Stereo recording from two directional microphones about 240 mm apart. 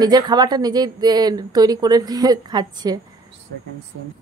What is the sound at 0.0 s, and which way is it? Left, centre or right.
A woman's voice, centre.